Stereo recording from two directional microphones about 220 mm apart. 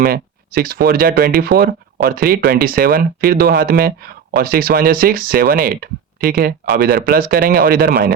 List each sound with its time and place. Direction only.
0.0 s speech: 40° right (ahead or behind)